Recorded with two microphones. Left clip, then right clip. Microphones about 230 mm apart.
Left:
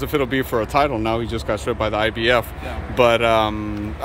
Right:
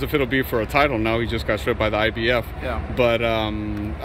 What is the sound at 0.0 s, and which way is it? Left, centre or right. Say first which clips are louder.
Speech: left 1 dB; centre.